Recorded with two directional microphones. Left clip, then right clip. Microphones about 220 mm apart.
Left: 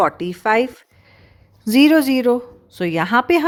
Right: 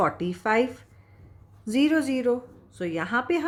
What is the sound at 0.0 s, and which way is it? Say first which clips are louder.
A woman's voice: left 7 dB; 45° left (ahead or behind).